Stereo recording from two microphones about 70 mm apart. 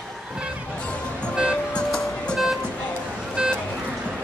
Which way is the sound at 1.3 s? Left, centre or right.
Centre.